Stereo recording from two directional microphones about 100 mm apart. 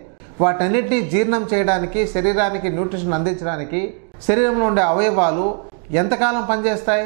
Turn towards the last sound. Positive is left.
turn(degrees=-15)  # may be behind; listen again after turning